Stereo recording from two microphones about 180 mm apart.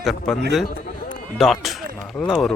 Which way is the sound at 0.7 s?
55° left (ahead or behind).